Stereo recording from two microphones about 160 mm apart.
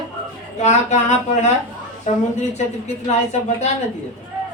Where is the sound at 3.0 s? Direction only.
45° left (ahead or behind).